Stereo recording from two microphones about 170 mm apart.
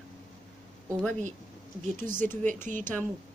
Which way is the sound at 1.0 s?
10° left (ahead or behind).